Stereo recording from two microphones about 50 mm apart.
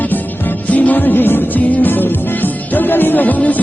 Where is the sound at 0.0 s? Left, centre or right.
Left.